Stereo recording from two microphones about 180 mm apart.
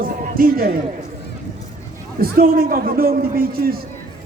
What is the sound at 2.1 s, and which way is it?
A man's voice, 55° right (ahead or behind).